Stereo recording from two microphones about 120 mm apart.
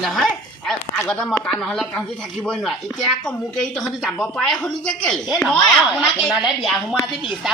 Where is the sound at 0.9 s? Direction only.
15° left (ahead or behind).